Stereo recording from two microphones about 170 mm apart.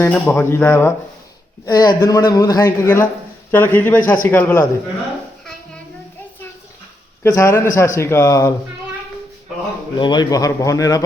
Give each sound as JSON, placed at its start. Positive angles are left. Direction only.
{"t": 0.0, "sound": "speech", "side_deg": 10}
{"t": 7.2, "sound": "speech", "side_deg": 15}
{"t": 10.0, "sound": "speech", "side_deg": 25}